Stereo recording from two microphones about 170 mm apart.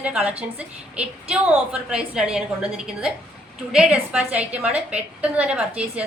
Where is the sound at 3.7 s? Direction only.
5° right (ahead or behind).